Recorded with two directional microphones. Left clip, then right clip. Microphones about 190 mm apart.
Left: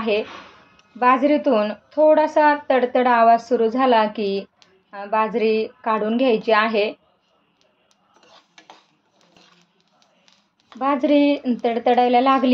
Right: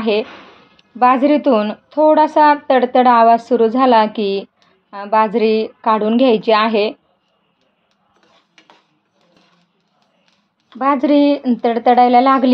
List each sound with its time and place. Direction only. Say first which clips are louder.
0.0 s speech: right 4 dB; 30° right (ahead or behind)
10.8 s speech: right 4 dB; 30° right (ahead or behind)